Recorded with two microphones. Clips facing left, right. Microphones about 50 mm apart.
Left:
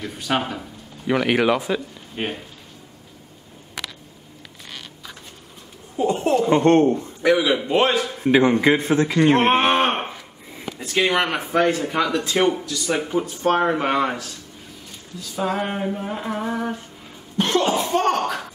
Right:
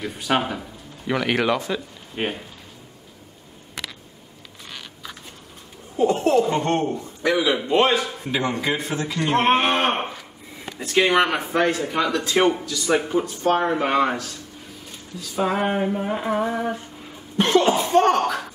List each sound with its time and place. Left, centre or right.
0.0 s speech: centre
2.1 s speech: centre
5.9 s a sound: centre
6.4 s a man's voice: left
7.2 s speech: centre
8.3 s a man's voice: left
9.7 s a sound: centre
10.8 s speech: centre
12.4 s a sound: centre
12.9 s speech: centre
13.2 s speech: centre
15.3 s a sound: centre